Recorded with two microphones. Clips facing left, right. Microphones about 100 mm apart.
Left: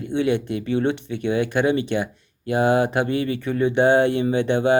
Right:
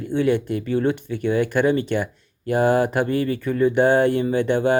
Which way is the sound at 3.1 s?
45° right (ahead or behind).